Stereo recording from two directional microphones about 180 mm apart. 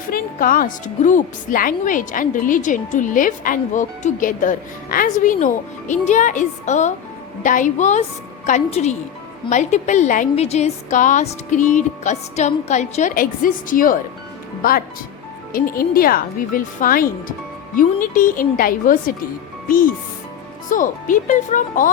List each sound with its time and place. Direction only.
0.1 s a woman's voice: 50° left (ahead or behind)